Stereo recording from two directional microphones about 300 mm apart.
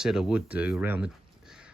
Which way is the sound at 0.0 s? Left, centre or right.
Centre.